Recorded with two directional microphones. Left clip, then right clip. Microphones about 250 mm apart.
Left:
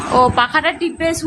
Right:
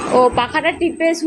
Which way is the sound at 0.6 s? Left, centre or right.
Left.